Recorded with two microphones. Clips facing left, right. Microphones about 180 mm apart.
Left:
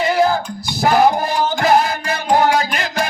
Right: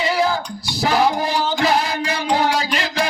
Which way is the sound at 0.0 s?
50° left (ahead or behind).